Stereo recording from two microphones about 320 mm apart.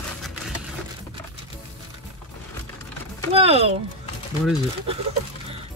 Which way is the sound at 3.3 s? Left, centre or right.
Centre.